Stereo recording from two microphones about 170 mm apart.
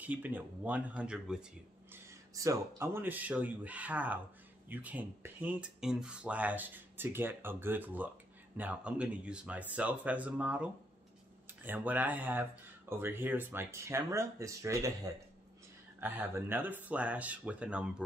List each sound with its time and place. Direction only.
0.0 s speech: 10° right (ahead or behind)
1.9 s speech: 15° right (ahead or behind)
16.0 s speech: 10° right (ahead or behind)